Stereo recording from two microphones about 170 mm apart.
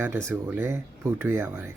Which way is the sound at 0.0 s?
15° right (ahead or behind).